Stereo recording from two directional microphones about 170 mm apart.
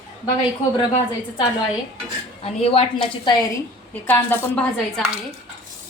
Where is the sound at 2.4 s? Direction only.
35° left (ahead or behind).